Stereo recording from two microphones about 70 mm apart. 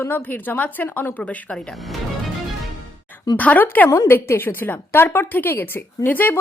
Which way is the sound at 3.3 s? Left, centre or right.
Left.